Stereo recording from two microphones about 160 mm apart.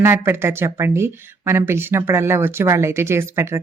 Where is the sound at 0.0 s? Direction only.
15° right (ahead or behind).